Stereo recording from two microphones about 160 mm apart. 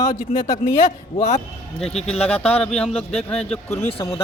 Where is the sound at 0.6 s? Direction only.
45° left (ahead or behind).